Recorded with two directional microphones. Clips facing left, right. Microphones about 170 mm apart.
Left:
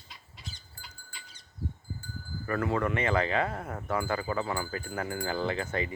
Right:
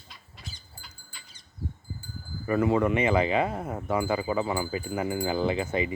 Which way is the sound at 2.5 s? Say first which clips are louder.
Right 6 dB; 15° right (ahead or behind).